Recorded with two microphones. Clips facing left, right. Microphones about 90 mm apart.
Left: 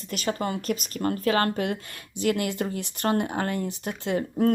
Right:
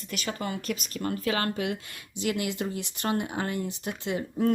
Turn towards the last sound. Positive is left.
turn(degrees=45)  # may be behind; listen again after turning